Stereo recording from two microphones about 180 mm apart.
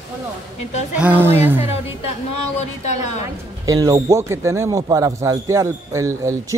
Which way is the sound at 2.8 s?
40° left (ahead or behind).